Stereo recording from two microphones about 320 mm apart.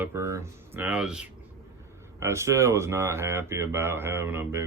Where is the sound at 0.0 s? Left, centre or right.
Centre.